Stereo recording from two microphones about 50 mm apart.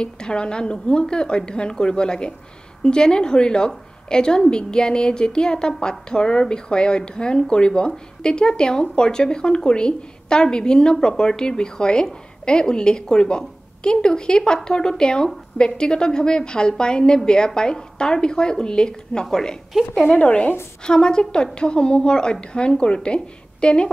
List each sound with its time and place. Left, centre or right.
0.0 s a woman's voice: centre
20.1 s speech: left
20.8 s a woman's voice: centre